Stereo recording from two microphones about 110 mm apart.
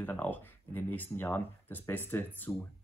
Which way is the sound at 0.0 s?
15° left (ahead or behind).